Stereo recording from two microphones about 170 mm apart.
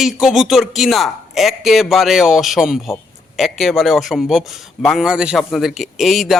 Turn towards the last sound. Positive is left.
turn(degrees=0)  # may be behind; listen again after turning